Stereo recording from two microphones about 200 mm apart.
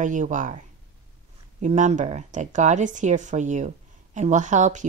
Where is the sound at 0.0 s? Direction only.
40° right (ahead or behind).